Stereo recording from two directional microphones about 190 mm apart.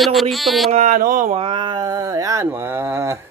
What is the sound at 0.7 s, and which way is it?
Speech, 40° right (ahead or behind).